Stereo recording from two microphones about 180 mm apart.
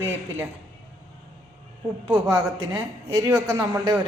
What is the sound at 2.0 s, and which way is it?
A man's voice, 20° right (ahead or behind).